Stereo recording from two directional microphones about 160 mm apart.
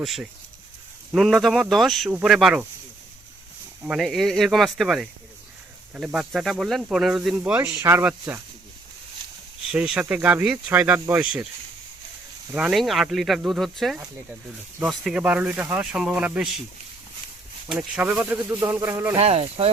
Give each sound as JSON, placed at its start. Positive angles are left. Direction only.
{"t": 0.0, "sound": "speech", "side_deg": 0}
{"t": 3.8, "sound": "speech", "side_deg": 0}
{"t": 9.7, "sound": "speech", "side_deg": -5}
{"t": 12.5, "sound": "speech", "side_deg": -5}
{"t": 17.7, "sound": "speech", "side_deg": -5}
{"t": 19.1, "sound": "speech", "side_deg": -40}